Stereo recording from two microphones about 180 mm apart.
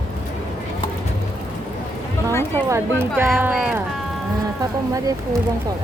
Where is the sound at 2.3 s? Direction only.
15° left (ahead or behind).